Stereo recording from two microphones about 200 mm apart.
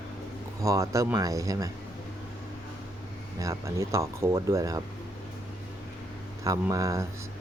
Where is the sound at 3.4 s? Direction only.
15° right (ahead or behind).